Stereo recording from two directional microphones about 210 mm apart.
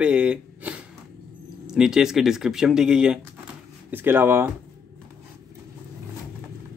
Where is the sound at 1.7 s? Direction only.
5° right (ahead or behind).